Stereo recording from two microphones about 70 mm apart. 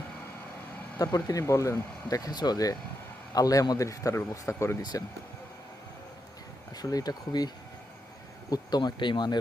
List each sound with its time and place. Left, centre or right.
0.9 s a man's voice: left
2.0 s a man's voice: left
4.8 s speech: left
6.7 s speech: left